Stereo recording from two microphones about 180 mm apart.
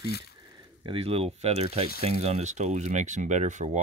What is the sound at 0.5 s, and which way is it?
Speech, 30° right (ahead or behind).